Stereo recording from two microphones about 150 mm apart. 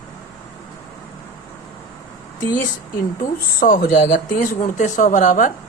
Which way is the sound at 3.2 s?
75° left (ahead or behind).